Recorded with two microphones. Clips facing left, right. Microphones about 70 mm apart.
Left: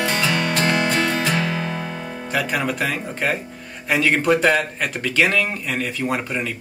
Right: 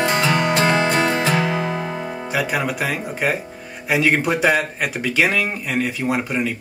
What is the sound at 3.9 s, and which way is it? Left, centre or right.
Speech, centre.